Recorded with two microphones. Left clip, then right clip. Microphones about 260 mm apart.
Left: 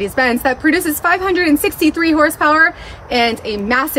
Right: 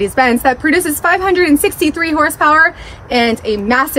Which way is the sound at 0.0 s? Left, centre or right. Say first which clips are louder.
Right 3 dB; right.